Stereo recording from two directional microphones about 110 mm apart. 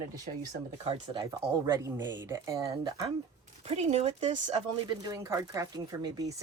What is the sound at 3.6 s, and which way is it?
Speech, 75° right (ahead or behind).